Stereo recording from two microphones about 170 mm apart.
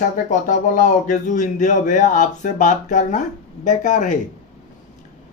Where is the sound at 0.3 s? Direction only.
50° left (ahead or behind).